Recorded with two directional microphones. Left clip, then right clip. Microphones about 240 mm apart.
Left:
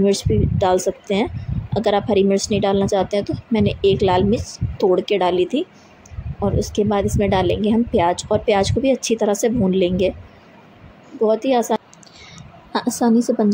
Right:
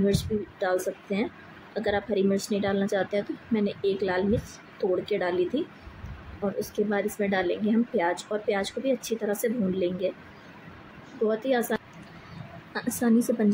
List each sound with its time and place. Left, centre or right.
0.0 s speech: left
11.2 s a woman's voice: left